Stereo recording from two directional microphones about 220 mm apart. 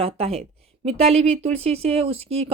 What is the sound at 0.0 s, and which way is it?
Speech, 25° right (ahead or behind).